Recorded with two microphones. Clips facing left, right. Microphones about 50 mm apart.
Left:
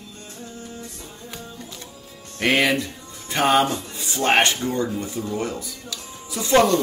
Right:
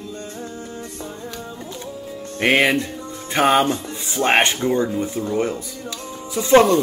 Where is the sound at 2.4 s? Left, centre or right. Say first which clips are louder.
Right 3 dB; right.